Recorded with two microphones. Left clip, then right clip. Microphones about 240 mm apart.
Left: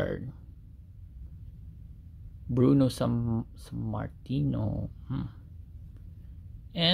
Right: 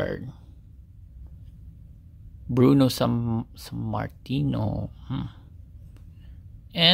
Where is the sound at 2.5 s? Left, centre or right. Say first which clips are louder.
Right 5 dB; centre.